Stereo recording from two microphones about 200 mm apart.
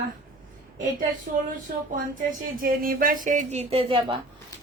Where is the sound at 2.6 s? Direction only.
45° right (ahead or behind); by 4.2 s 30° right (ahead or behind).